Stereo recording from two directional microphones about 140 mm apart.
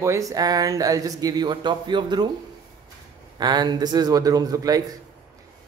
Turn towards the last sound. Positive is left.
turn(degrees=-25)  # may be behind; listen again after turning